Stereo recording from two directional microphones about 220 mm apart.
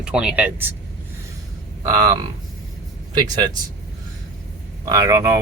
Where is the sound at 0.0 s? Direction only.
5° right (ahead or behind).